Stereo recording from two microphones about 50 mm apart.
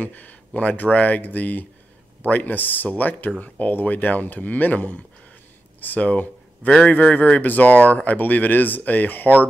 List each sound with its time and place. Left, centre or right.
0.0 s speech: left